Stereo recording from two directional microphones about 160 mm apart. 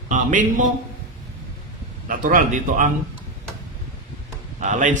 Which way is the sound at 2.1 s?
60° right (ahead or behind).